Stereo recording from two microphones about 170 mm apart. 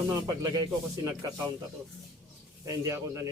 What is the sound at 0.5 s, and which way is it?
Speech, 20° right (ahead or behind).